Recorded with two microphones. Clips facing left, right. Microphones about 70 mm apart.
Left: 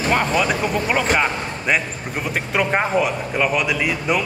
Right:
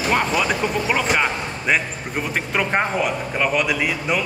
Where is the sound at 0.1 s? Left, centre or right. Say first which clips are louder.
Left 1 dB; centre.